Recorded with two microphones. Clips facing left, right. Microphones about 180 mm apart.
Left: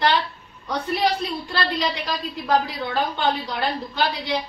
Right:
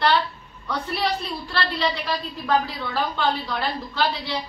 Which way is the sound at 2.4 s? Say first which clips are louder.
Left 2 dB; 20° left (ahead or behind).